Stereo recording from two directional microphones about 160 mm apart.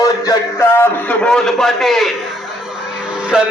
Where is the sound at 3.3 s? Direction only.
5° right (ahead or behind).